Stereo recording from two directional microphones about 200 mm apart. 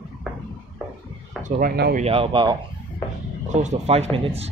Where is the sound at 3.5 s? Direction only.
35° right (ahead or behind).